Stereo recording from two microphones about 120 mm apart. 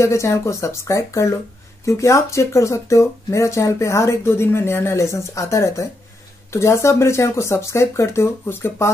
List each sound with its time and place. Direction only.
0.0 s speech: 25° left (ahead or behind)